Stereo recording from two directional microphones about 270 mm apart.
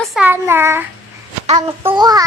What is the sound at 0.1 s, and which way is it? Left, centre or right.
Child singing, centre.